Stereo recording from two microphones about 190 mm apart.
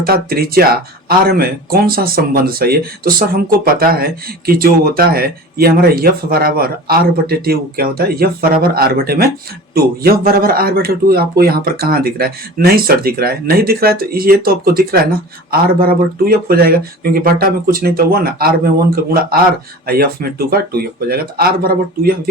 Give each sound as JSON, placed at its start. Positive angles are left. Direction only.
{"t": 0.0, "sound": "speech", "side_deg": -50}
{"t": 19.9, "sound": "speech", "side_deg": -55}